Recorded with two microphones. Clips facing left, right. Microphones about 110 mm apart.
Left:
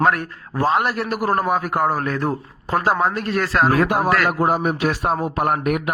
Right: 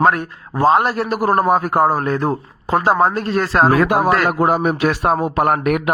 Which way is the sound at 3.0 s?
35° right (ahead or behind).